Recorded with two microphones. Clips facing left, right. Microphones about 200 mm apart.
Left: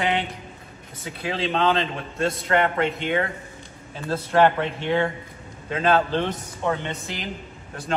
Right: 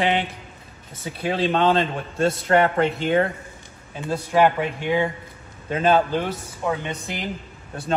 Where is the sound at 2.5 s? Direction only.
30° right (ahead or behind).